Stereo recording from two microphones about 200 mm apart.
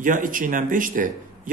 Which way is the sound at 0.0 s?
40° right (ahead or behind).